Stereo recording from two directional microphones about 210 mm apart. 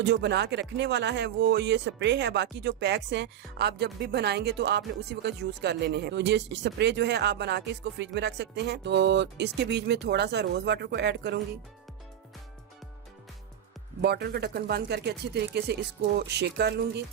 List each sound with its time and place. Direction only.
0.0 s speech: 55° right (ahead or behind)
14.0 s speech: 50° right (ahead or behind)